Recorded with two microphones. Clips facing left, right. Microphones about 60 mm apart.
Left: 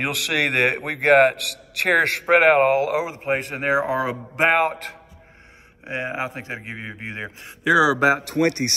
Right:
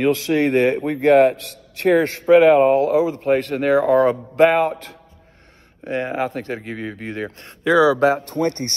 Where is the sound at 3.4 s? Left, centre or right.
Left.